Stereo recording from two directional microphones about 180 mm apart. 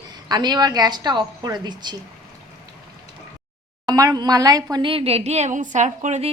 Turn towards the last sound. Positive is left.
turn(degrees=-40)  # may be behind; listen again after turning